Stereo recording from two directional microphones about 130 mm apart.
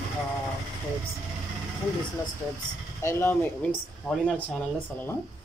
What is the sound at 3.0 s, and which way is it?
Speech, 20° left (ahead or behind).